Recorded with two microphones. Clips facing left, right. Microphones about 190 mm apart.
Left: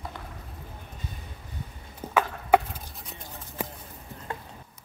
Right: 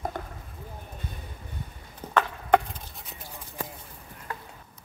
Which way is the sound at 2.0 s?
10° left (ahead or behind).